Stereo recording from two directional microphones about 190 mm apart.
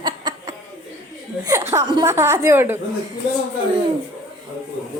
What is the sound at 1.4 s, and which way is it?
Speech, 15° right (ahead or behind).